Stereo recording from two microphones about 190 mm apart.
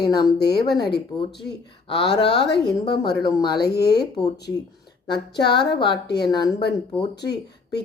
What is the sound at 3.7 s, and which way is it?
Speech, 60° left (ahead or behind).